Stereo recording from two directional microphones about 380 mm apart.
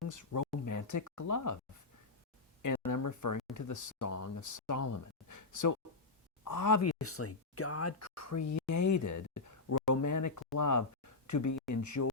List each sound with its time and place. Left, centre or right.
0.1 s speech: left
2.6 s speech: left